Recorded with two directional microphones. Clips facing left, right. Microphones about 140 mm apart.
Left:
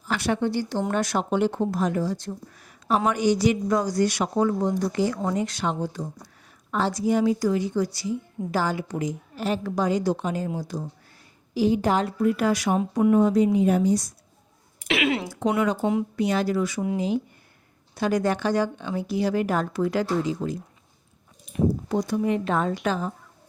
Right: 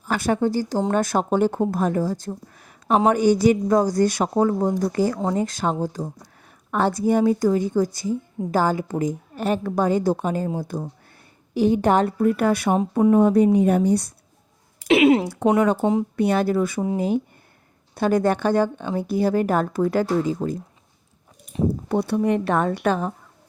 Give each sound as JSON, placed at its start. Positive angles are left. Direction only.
{"t": 0.0, "sound": "a woman's voice", "side_deg": -45}
{"t": 6.7, "sound": "a woman's voice", "side_deg": -55}
{"t": 14.8, "sound": "a sound", "side_deg": -90}
{"t": 15.4, "sound": "a woman's voice", "side_deg": -45}
{"t": 15.8, "sound": "speech", "side_deg": -35}
{"t": 16.1, "sound": "a woman's voice", "side_deg": -55}
{"t": 17.9, "sound": "a woman's voice", "side_deg": -50}
{"t": 21.8, "sound": "a woman's voice", "side_deg": -60}